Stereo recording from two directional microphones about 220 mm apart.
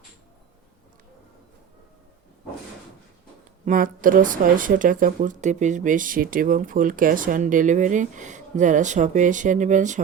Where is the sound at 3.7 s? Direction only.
40° right (ahead or behind).